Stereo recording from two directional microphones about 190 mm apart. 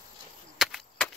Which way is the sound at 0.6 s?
Centre (ahead or behind).